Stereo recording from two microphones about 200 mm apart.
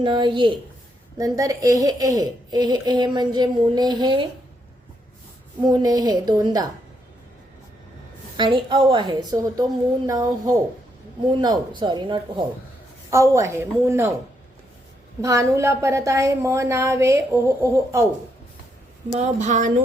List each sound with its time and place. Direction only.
0.0 s a woman's voice: 25° right (ahead or behind)
5.6 s a woman's voice: 20° right (ahead or behind)
8.4 s a woman's voice: 25° right (ahead or behind)
15.2 s a woman's voice: 15° right (ahead or behind)
19.2 s speech: 40° right (ahead or behind)